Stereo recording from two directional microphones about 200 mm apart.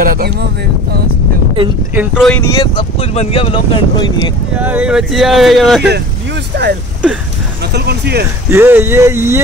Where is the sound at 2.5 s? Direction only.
25° left (ahead or behind).